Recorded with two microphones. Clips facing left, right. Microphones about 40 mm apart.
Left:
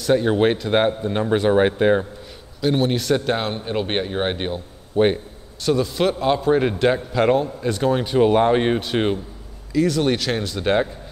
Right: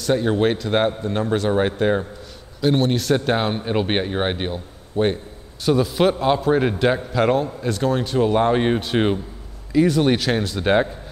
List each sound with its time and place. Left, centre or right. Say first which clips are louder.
0.0 s a man's voice: left 2 dB; centre
4.9 s a man's voice: left 3 dB; centre
5.7 s a man's voice: right 2 dB; centre
8.5 s a man's voice: left 1 dB; centre
9.7 s speech: right 2 dB; centre